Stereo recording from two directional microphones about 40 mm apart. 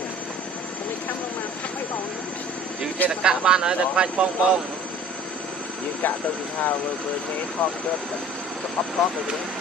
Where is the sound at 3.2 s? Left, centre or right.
Right.